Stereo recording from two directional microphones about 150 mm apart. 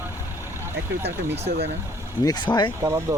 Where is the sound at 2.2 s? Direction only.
30° left (ahead or behind).